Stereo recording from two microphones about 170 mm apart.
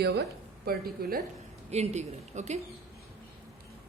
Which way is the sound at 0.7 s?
65° right (ahead or behind).